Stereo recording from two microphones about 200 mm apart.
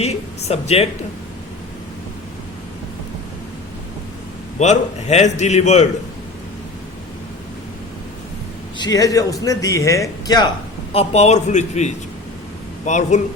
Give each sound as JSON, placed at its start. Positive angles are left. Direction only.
{"t": 0.0, "sound": "speech", "side_deg": 30}
{"t": 4.6, "sound": "a man's voice", "side_deg": 35}
{"t": 8.8, "sound": "speech", "side_deg": 20}
{"t": 10.9, "sound": "a man's voice", "side_deg": 30}